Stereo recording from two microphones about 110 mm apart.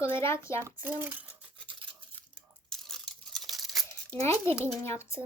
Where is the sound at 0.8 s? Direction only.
15° right (ahead or behind).